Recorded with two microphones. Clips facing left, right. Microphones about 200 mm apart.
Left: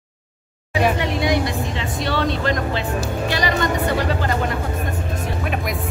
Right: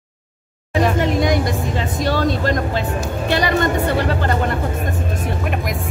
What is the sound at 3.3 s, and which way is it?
Music, 55° right (ahead or behind).